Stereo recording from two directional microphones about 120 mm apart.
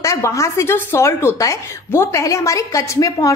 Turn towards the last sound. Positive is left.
turn(degrees=30)  # may be behind; listen again after turning